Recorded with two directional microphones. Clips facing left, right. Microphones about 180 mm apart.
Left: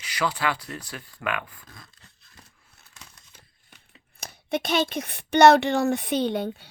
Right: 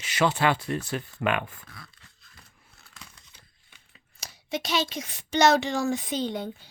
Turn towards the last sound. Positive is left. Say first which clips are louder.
# left 5 dB
turn(degrees=65)  # may be behind; listen again after turning